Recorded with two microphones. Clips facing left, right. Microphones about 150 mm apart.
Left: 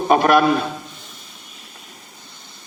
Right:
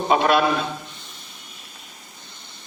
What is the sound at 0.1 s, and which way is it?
Speech, 50° left (ahead or behind).